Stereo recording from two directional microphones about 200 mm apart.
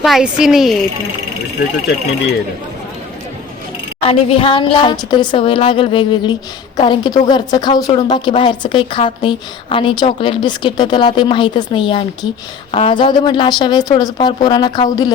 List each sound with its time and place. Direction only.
0.0 s a woman's voice: centre (ahead or behind)
4.0 s a woman's voice: 30° left (ahead or behind)